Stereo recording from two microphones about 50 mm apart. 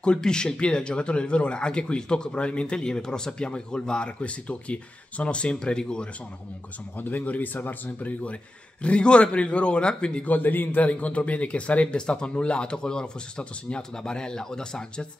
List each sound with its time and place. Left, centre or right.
0.0 s speech: centre
7.0 s speech: left
8.8 s speech: left
10.3 s speech: left; by 15.0 s centre